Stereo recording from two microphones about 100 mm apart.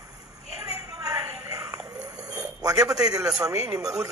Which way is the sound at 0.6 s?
35° right (ahead or behind).